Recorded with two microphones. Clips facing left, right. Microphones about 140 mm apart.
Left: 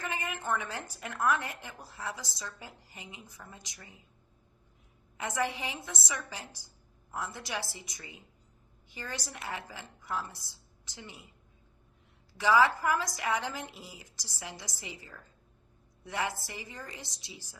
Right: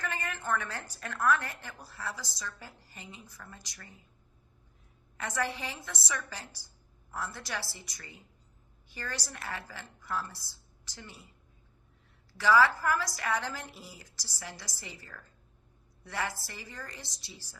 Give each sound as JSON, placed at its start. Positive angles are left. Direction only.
{"t": 0.0, "sound": "a woman's voice", "side_deg": 15}
{"t": 5.1, "sound": "a woman's voice", "side_deg": 20}
{"t": 12.4, "sound": "a woman's voice", "side_deg": 20}